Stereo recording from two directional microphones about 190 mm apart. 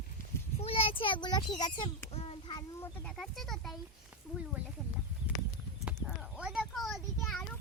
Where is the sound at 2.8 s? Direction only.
5° left (ahead or behind).